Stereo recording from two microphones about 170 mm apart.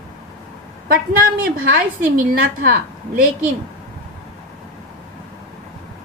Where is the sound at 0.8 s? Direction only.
60° right (ahead or behind).